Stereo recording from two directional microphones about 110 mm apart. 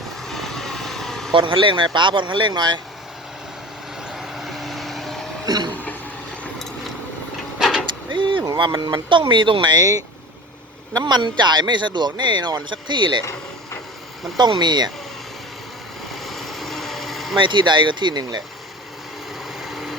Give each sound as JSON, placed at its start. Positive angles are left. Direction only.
{"t": 0.3, "sound": "vehicle", "side_deg": 0}
{"t": 1.3, "sound": "speech", "side_deg": -50}
{"t": 4.1, "sound": "vehicle", "side_deg": -5}
{"t": 5.5, "sound": "a sound", "side_deg": -40}
{"t": 7.6, "sound": "vehicle", "side_deg": -5}
{"t": 8.1, "sound": "a sound", "side_deg": -50}
{"t": 8.4, "sound": "speech", "side_deg": -40}
{"t": 10.9, "sound": "speech", "side_deg": -45}
{"t": 14.3, "sound": "speech", "side_deg": -40}
{"t": 16.1, "sound": "vehicle", "side_deg": 0}
{"t": 17.4, "sound": "speech", "side_deg": -45}
{"t": 19.5, "sound": "vehicle", "side_deg": 0}